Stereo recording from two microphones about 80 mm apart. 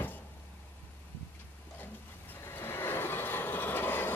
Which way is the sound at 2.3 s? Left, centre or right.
Left.